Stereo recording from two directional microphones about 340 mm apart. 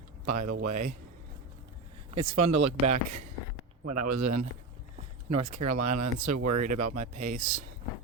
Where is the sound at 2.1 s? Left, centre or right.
Centre.